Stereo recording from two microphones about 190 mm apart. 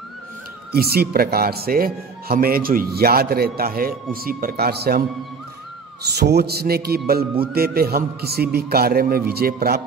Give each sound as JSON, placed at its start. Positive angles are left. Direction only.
{"t": 0.7, "sound": "a man's voice", "side_deg": -55}
{"t": 6.0, "sound": "a man's voice", "side_deg": -60}